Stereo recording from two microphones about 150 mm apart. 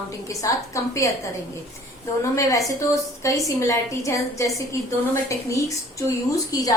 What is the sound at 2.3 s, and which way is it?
A woman's voice, 20° left (ahead or behind).